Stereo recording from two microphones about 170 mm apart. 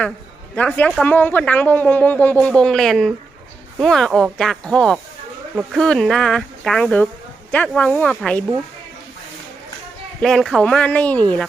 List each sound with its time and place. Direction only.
0.5 s speech: 10° left (ahead or behind)
10.2 s speech: centre (ahead or behind)